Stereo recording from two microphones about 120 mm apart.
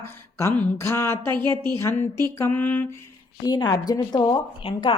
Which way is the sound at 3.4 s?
35° left (ahead or behind).